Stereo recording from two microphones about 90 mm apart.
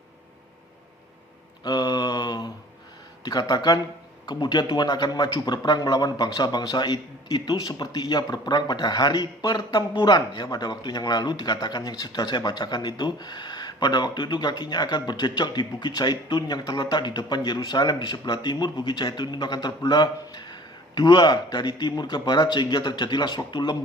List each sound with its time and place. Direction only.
1.6 s mantra: 50° left (ahead or behind)
3.5 s speech: 45° left (ahead or behind)